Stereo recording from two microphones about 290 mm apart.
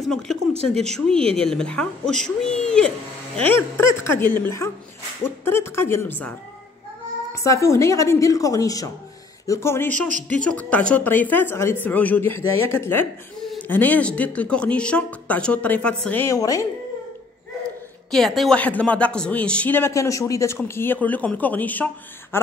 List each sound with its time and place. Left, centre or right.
0.7 s a woman's voice: centre
7.3 s a woman's voice: centre
9.9 s speech: right
10.4 s a woman's voice: centre
18.1 s a woman's voice: centre